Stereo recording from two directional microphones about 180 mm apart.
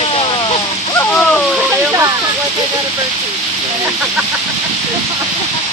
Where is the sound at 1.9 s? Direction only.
15° right (ahead or behind).